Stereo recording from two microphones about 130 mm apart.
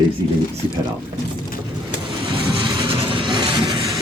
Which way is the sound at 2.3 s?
40° right (ahead or behind).